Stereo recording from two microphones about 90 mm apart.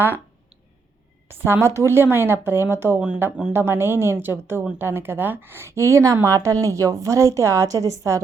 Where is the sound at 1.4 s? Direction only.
25° right (ahead or behind).